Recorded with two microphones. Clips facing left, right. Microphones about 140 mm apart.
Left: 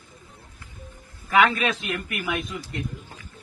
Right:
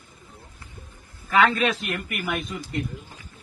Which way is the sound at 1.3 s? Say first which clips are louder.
Even; 10° left (ahead or behind).